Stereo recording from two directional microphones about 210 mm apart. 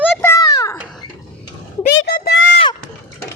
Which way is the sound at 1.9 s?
55° left (ahead or behind).